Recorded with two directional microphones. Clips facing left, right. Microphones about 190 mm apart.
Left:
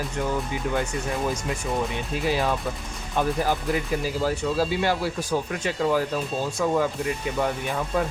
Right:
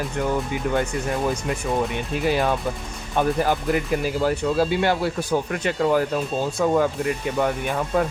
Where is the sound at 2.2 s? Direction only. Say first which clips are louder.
Right 3 dB; 55° right (ahead or behind).